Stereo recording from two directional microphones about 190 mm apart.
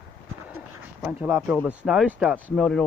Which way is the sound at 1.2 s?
5° right (ahead or behind).